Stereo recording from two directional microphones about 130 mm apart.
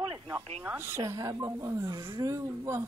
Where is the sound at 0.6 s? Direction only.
20° right (ahead or behind).